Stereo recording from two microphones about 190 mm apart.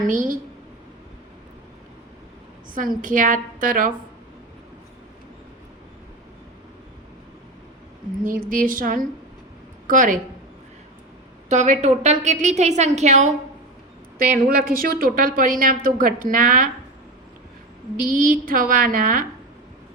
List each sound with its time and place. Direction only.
0.0 s speech: 45° right (ahead or behind)
3.0 s speech: 45° right (ahead or behind)
8.2 s speech: 45° right (ahead or behind)
11.4 s a woman's voice: 40° right (ahead or behind)
14.2 s speech: 50° right (ahead or behind)
17.9 s speech: 45° right (ahead or behind)